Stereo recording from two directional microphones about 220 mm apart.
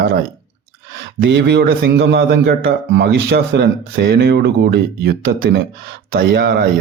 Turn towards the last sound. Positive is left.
turn(degrees=-45)  # may be behind; listen again after turning